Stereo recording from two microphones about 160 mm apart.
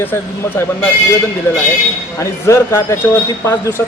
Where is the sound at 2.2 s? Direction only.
15° left (ahead or behind).